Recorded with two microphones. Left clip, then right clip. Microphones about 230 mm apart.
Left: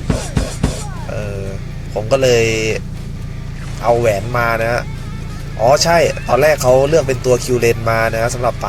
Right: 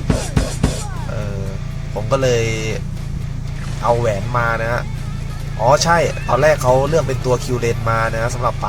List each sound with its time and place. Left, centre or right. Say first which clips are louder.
0.1 s music: even; centre
2.0 s speech: left 4 dB; centre
3.8 s speech: left 3 dB; centre